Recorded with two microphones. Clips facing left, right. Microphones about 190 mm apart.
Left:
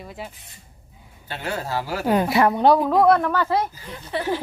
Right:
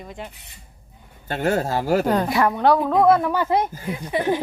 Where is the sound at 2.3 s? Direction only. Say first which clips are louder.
Left 2 dB; 20° left (ahead or behind).